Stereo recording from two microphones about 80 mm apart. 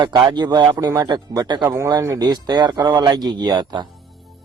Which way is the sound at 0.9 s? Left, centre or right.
Right.